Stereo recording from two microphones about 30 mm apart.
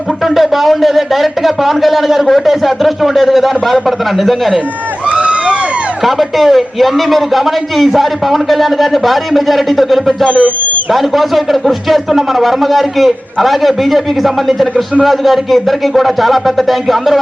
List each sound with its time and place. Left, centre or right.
0.3 s a man's voice: centre
5.0 s a sound: right
6.1 s a man's voice: centre
10.2 s speech: left
10.9 s a man's voice: centre